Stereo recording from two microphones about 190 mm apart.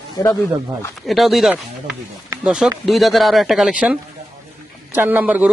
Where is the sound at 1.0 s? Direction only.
Centre (ahead or behind).